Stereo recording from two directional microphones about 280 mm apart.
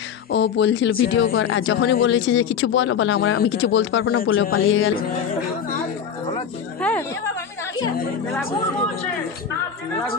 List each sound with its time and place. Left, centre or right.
0.3 s speech: left
6.8 s speech: centre